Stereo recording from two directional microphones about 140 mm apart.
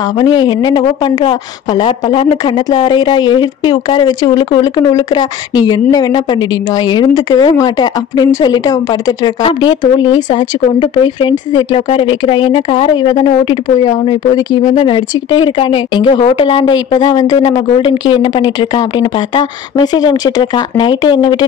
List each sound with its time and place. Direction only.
0.2 s a woman's voice: 30° left (ahead or behind)
14.6 s speech: 60° left (ahead or behind)
14.9 s a woman's voice: 35° left (ahead or behind)